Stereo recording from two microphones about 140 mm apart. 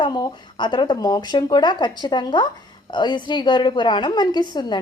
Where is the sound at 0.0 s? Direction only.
30° left (ahead or behind).